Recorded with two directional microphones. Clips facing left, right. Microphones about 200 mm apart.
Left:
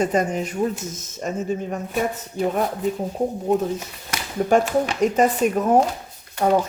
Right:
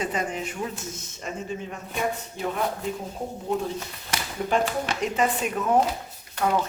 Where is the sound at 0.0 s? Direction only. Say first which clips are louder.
Left 7 dB; 45° left (ahead or behind).